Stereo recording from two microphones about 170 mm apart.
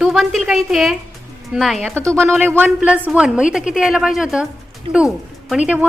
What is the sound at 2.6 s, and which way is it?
A woman's voice, 10° right (ahead or behind).